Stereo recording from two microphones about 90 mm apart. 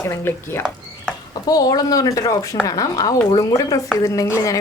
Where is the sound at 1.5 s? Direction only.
50° left (ahead or behind).